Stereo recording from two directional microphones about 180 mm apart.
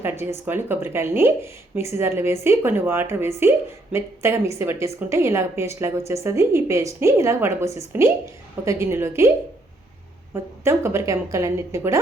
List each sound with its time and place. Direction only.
0.0 s a woman's voice: 15° right (ahead or behind)
10.6 s a woman's voice: 15° right (ahead or behind)